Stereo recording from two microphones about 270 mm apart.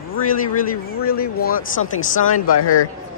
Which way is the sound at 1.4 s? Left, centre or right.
Left.